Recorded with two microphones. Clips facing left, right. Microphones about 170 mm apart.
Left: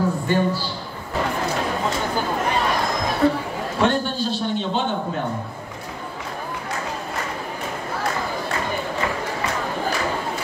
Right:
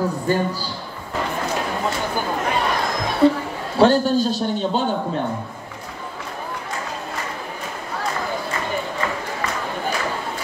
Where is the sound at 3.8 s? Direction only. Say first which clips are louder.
Right 6 dB; 35° right (ahead or behind).